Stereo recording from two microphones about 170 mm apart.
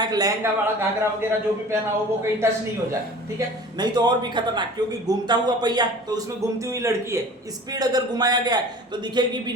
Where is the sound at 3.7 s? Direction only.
25° right (ahead or behind).